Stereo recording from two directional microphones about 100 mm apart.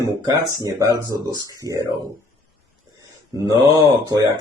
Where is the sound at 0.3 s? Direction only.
35° right (ahead or behind).